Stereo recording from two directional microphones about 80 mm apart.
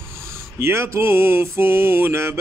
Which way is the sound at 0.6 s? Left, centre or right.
Right.